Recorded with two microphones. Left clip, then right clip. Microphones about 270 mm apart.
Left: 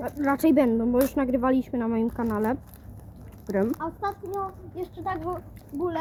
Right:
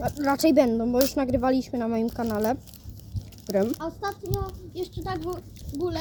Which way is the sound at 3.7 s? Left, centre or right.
Centre.